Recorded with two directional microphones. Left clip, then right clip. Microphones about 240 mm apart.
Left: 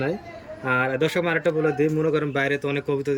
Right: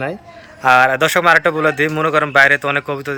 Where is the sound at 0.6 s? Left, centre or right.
Right.